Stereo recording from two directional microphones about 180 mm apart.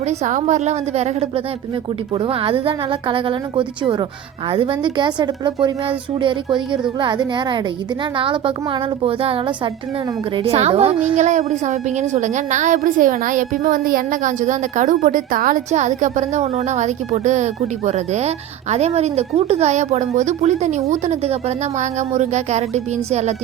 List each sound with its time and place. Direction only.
0.3 s a woman's voice: 45° right (ahead or behind); by 5.7 s 25° right (ahead or behind)
7.0 s a woman's voice: 25° right (ahead or behind)